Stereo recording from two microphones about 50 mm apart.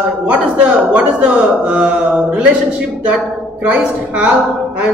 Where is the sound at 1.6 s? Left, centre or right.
Right.